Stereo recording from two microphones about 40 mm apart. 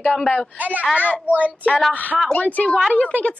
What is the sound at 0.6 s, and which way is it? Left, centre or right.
A child's voice, right.